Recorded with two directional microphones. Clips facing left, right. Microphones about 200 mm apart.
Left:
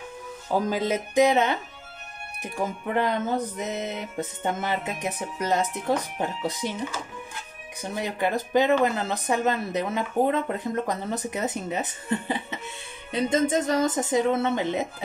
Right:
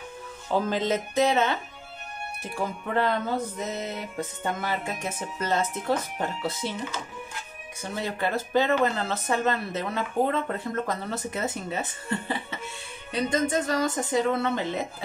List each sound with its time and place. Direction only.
0.5 s speech: 10° left (ahead or behind)
2.4 s music: 15° left (ahead or behind)
5.0 s speech: 15° left (ahead or behind)
7.8 s speech: 15° left (ahead or behind)
13.1 s music: 20° left (ahead or behind)